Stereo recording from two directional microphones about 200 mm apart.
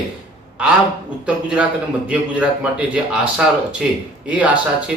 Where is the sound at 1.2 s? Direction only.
5° right (ahead or behind).